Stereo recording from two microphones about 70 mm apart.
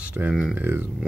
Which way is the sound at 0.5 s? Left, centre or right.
Right.